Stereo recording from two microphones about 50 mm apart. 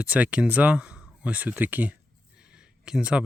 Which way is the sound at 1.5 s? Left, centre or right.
Right.